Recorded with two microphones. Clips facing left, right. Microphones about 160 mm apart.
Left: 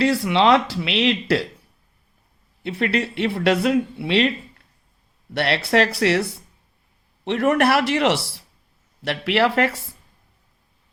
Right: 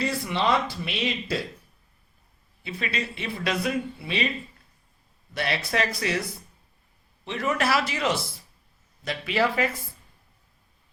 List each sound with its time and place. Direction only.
0.0 s speech: 85° left
2.6 s speech: 65° left (ahead or behind)
7.3 s speech: 70° left (ahead or behind)